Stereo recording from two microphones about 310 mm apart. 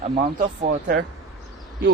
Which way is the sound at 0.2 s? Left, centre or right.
Right.